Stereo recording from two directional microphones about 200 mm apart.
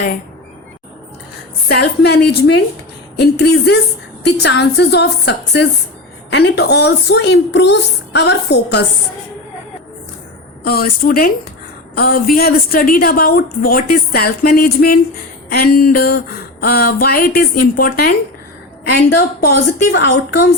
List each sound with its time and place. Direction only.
1.6 s a woman's voice: 50° left (ahead or behind)
10.6 s a woman's voice: 50° left (ahead or behind)
19.1 s a woman's voice: 55° left (ahead or behind)